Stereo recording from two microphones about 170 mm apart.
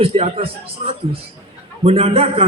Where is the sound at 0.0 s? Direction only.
35° right (ahead or behind).